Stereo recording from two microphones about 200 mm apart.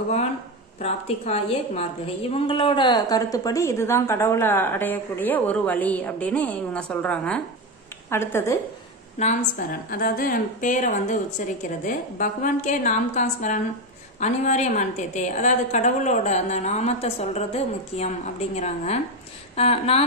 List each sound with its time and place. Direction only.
0.7 s a woman's voice: 35° left (ahead or behind); by 8.5 s 10° left (ahead or behind)
9.2 s a woman's voice: 35° left (ahead or behind)